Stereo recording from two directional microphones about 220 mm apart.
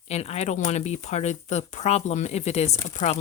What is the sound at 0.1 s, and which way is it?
Speech, 30° left (ahead or behind).